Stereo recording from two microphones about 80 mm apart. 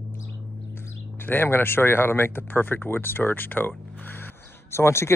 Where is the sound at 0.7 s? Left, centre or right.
Left.